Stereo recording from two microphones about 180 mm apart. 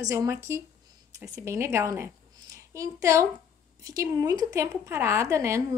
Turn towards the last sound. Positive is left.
turn(degrees=-15)  # may be behind; listen again after turning